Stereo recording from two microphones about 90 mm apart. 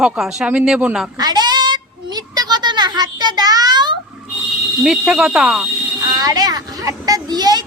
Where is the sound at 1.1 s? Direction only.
50° right (ahead or behind).